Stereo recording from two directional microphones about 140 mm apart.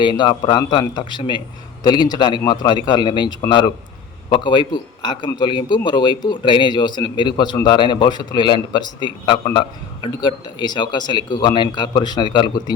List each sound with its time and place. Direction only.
0.0 s a man's voice: 35° left (ahead or behind)